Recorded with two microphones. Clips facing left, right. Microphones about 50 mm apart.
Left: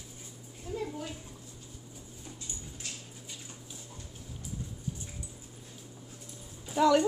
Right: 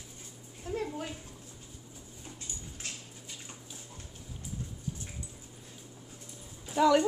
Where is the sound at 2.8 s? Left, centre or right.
Right.